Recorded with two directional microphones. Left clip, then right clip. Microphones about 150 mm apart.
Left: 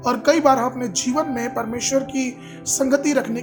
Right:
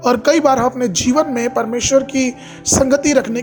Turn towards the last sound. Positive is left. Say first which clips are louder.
# right 5 dB
turn(degrees=-30)  # may be behind; listen again after turning